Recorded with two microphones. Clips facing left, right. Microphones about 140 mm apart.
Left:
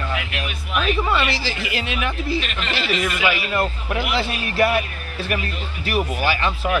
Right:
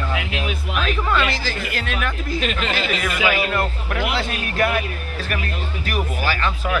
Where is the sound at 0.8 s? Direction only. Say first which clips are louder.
Left 2 dB; 5° left (ahead or behind).